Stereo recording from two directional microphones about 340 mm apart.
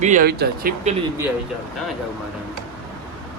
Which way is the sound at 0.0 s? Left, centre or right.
Right.